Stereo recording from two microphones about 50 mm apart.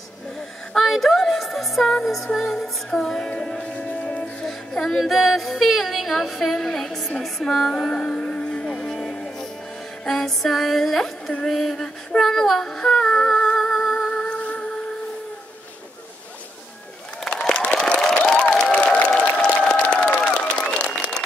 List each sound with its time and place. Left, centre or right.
0.7 s music: centre; by 4.5 s left
4.5 s female singing: centre
7.9 s music: centre
11.4 s female singing: centre; by 14.8 s left
17.2 s a sound: centre
19.4 s applause: centre
19.9 s crowd: left
20.3 s applause: centre